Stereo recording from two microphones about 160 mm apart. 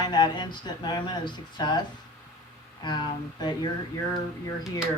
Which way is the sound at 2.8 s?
25° left (ahead or behind).